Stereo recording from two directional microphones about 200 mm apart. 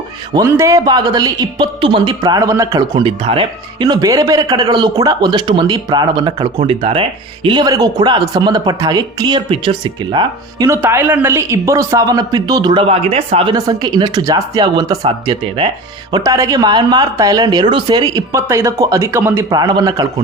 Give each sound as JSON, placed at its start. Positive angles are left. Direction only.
{"t": 0.3, "sound": "speech", "side_deg": -15}
{"t": 10.8, "sound": "speech", "side_deg": -10}